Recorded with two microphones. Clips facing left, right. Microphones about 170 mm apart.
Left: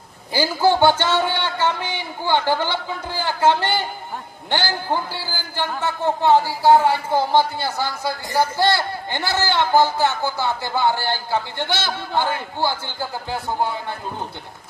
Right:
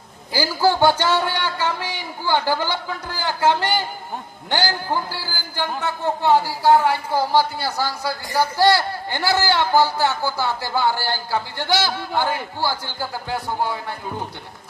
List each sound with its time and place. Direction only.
0.3 s speech: 20° left (ahead or behind)
4.7 s speech: 20° left (ahead or behind)